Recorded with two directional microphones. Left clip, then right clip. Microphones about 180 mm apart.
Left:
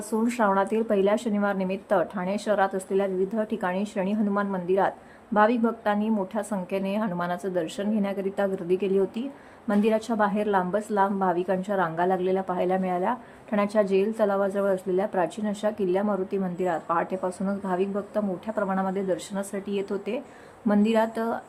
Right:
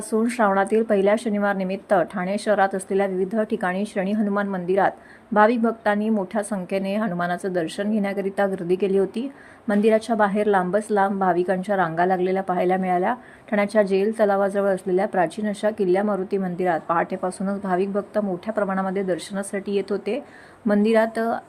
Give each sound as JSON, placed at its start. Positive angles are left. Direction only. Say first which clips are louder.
{"t": 0.1, "sound": "a woman's voice", "louder": "right 4 dB", "side_deg": -20}